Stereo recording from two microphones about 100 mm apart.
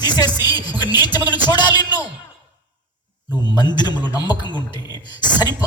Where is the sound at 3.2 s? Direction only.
45° left (ahead or behind).